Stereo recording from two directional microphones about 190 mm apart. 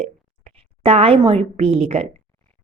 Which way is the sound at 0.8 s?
30° right (ahead or behind).